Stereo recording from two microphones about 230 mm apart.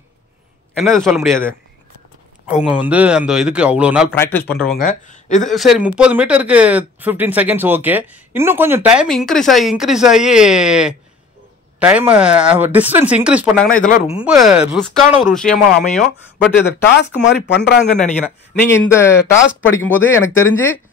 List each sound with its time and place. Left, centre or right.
0.7 s a man's voice: centre
2.5 s speech: centre
4.1 s speech: centre
4.6 s speech: left
5.5 s speech: centre
13.8 s speech: left
14.1 s a man's voice: centre
16.8 s speech: left
18.5 s speech: centre
19.3 s speech: left
19.7 s speech: centre